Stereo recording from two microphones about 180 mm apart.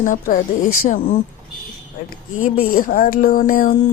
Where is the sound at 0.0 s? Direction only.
45° left (ahead or behind).